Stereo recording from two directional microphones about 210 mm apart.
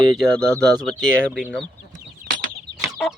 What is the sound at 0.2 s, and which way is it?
Speech, 5° left (ahead or behind).